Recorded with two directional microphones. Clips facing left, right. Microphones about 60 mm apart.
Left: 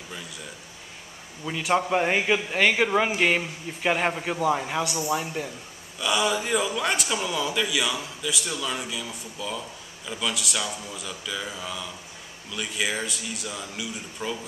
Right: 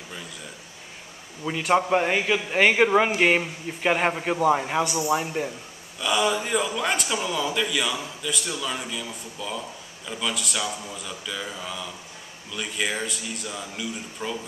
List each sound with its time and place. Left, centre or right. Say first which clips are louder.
1.7 s speech: right 2 dB; centre
2.0 s a man's voice: even; centre
2.5 s speech: right 5 dB; centre
5.9 s a man's voice: right 1 dB; centre